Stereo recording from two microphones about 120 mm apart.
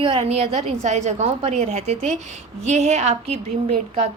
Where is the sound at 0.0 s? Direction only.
45° right (ahead or behind).